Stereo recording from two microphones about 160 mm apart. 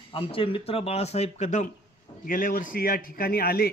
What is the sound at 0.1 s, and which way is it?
Speech, 35° left (ahead or behind).